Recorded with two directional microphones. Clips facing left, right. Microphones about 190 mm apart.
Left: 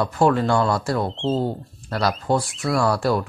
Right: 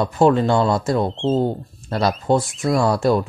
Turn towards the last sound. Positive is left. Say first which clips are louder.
# right 3 dB
turn(degrees=-20)  # may be behind; listen again after turning